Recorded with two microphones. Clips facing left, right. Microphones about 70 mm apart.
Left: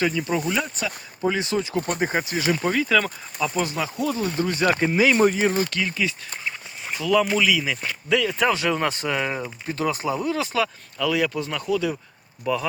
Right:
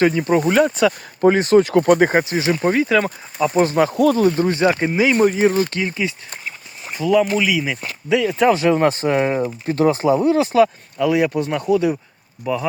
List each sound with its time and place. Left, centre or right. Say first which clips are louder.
0.0 s speech: right 7 dB; right
1.7 s speech: right 11 dB; right
2.0 s speech: right 7 dB; right
2.4 s speech: right 5 dB; right
3.8 s speech: right 10 dB; right
4.4 s speech: right 5 dB; right
5.1 s speech: right 3 dB; centre
5.5 s speech: right 4 dB; right
6.9 s speech: right 4 dB; centre; by 11.9 s right
12.4 s speech: right 2 dB; centre